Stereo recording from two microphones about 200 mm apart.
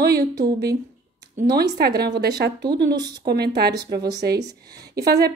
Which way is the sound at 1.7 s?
55° right (ahead or behind).